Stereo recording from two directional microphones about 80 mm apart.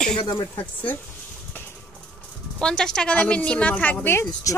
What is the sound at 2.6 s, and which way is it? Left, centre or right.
Speech, centre.